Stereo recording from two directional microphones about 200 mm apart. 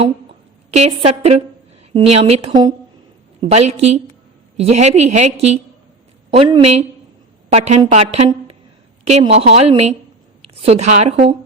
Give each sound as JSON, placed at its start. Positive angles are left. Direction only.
{"t": 0.7, "sound": "a woman's voice", "side_deg": -30}
{"t": 9.2, "sound": "a woman's voice", "side_deg": -30}